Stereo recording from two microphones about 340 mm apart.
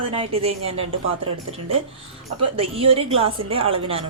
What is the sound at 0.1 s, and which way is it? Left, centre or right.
A woman's voice, centre.